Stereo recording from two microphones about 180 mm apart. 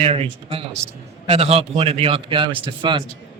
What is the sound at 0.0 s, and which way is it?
A man's voice, 30° right (ahead or behind).